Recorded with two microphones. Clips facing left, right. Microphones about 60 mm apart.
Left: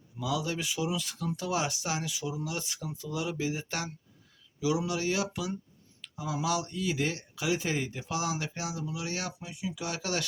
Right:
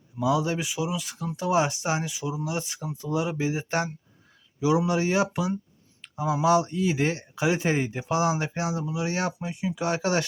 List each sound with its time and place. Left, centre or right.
0.2 s speech: right